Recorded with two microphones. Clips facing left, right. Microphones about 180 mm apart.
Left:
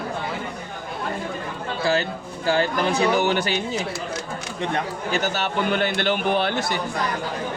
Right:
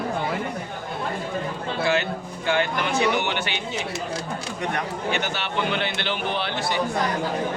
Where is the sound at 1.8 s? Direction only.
35° left (ahead or behind).